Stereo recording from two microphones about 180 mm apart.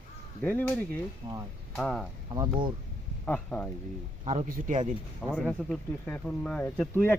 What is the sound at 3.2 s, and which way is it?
Speech, 5° left (ahead or behind).